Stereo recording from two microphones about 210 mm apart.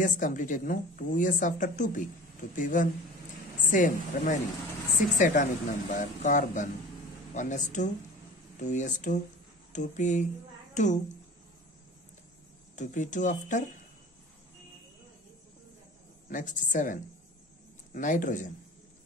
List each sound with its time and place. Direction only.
0.0 s a woman's voice: 40° left (ahead or behind)
10.7 s a sound: 35° left (ahead or behind)
12.7 s a woman's voice: 35° left (ahead or behind)
16.3 s a woman's voice: 40° left (ahead or behind)